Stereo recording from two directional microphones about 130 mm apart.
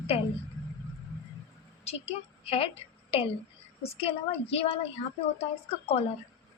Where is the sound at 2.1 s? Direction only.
55° left (ahead or behind).